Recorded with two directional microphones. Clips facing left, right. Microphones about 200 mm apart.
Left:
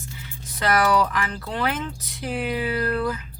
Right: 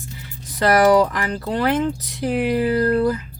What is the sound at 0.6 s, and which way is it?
Speech, 35° right (ahead or behind).